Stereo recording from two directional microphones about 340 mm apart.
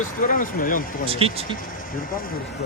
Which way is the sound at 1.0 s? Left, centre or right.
Centre.